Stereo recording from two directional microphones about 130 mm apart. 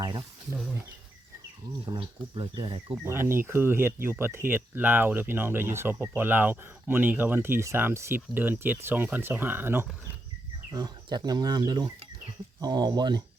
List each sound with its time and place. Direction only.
0.0 s a sound: 30° right (ahead or behind)
1.9 s speech: 40° right (ahead or behind)
3.0 s speech: 20° right (ahead or behind)
10.7 s speech: 30° right (ahead or behind)